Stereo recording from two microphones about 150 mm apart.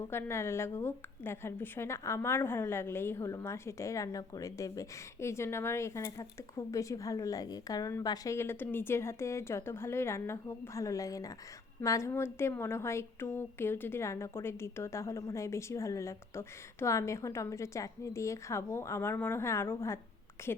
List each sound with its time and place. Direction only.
0.1 s a woman's voice: 15° left (ahead or behind)